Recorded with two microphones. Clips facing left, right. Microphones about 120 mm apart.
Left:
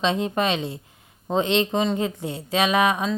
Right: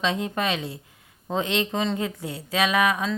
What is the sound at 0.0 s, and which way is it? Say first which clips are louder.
Speech: left 3 dB; 25° left (ahead or behind).